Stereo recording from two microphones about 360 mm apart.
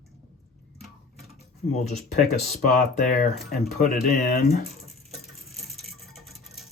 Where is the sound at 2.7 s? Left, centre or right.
Left.